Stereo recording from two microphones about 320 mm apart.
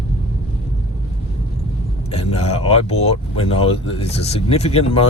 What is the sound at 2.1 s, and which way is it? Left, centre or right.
A man's voice, centre.